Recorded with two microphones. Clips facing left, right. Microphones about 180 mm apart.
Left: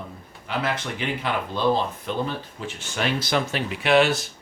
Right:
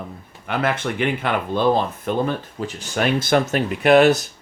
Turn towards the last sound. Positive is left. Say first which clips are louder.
# right 6 dB
turn(degrees=-45)  # may be behind; listen again after turning